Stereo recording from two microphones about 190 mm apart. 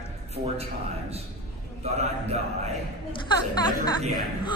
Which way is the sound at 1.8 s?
35° right (ahead or behind).